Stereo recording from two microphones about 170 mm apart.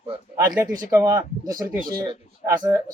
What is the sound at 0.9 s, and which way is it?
Speech, 15° right (ahead or behind).